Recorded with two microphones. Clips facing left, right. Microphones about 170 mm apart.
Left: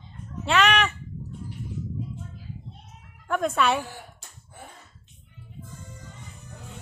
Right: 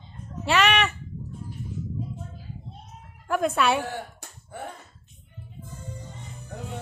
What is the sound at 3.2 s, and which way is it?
Speech, 5° right (ahead or behind).